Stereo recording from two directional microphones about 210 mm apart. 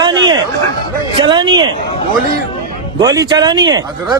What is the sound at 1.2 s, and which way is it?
Speech, 20° right (ahead or behind).